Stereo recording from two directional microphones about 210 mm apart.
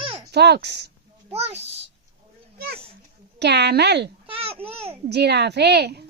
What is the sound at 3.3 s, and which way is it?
Speech, 55° right (ahead or behind).